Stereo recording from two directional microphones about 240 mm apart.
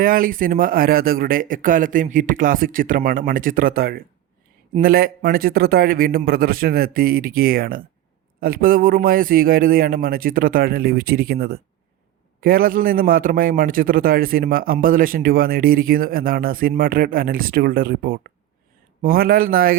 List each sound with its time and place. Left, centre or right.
0.0 s a man's voice: right